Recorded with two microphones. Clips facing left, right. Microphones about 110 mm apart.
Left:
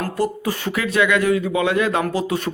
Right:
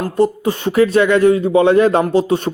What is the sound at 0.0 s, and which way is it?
Speech, 25° right (ahead or behind).